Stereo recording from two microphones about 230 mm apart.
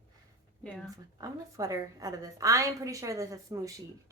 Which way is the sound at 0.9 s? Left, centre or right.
Centre.